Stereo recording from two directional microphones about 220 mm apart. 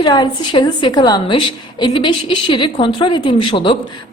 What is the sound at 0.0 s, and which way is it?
A woman's voice, 20° left (ahead or behind).